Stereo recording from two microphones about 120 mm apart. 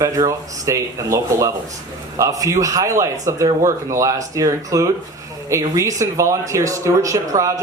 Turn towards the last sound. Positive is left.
turn(degrees=-25)  # may be behind; listen again after turning